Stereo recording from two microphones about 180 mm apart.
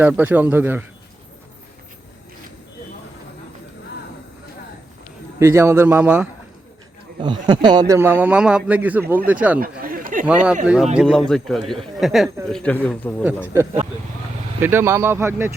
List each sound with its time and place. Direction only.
0.0 s a man's voice: 10° right (ahead or behind)
5.4 s a man's voice: 15° right (ahead or behind)
7.2 s a man's voice: 25° right (ahead or behind); by 9.6 s 10° right (ahead or behind)
9.6 s a sound: 55° right (ahead or behind)
10.2 s speech: 5° right (ahead or behind)
13.2 s a man's voice: 15° right (ahead or behind)